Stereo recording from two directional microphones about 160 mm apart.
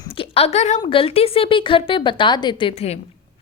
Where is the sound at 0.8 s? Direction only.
35° left (ahead or behind).